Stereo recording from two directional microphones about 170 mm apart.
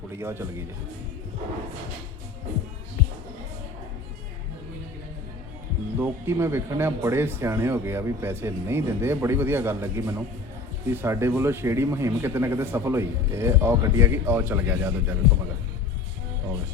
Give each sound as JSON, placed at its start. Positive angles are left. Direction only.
{"t": 0.2, "sound": "speech", "side_deg": -15}
{"t": 6.0, "sound": "speech", "side_deg": -15}